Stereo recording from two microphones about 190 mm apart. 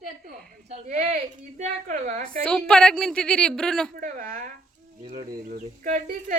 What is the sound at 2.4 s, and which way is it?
Speech, 5° left (ahead or behind).